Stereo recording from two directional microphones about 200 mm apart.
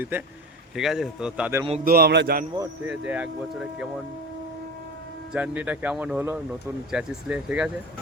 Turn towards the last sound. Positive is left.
turn(degrees=-5)  # may be behind; listen again after turning